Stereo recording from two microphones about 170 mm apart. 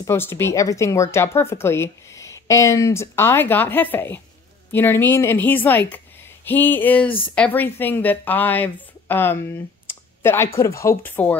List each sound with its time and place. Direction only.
0.0 s speech: 15° left (ahead or behind)